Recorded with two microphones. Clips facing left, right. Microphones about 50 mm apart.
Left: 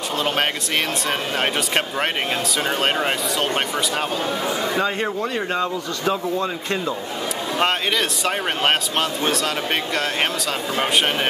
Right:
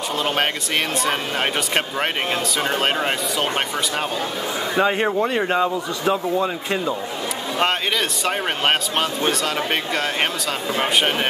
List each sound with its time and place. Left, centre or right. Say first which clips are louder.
2.7 s speech: left 1 dB; centre
4.7 s speech: right 3 dB; centre
8.3 s speech: even; centre